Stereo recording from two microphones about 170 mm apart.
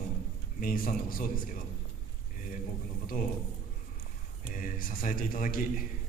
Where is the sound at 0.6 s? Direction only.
55° left (ahead or behind).